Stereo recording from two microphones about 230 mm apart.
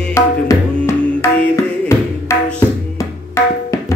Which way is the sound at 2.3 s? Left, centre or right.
Centre.